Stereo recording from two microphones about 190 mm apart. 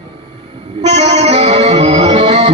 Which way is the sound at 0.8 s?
35° right (ahead or behind).